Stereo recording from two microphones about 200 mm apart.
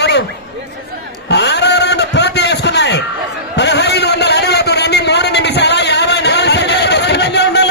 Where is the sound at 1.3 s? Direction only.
60° left (ahead or behind).